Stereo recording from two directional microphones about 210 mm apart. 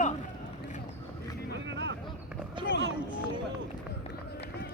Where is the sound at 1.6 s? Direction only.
60° right (ahead or behind).